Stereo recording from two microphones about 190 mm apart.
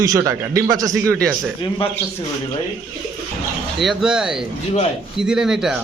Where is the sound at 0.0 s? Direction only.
20° right (ahead or behind).